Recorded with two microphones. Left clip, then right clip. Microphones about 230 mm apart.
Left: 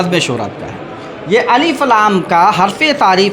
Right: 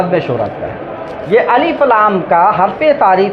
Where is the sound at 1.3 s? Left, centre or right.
Left.